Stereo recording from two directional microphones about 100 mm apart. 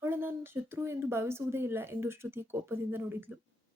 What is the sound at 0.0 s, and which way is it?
A woman's voice, 20° right (ahead or behind).